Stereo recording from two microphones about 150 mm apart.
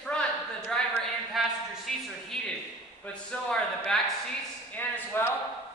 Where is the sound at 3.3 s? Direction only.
5° left (ahead or behind).